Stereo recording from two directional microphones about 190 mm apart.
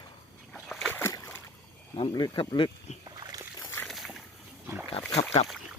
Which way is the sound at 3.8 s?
Centre (ahead or behind).